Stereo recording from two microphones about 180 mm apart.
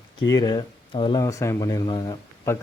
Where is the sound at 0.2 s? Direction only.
20° left (ahead or behind).